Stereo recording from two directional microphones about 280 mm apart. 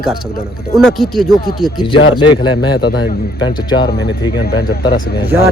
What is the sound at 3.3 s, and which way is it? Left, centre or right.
Speech, centre.